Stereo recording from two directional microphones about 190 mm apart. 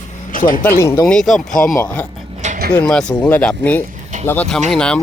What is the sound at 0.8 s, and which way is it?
Speech, 15° left (ahead or behind).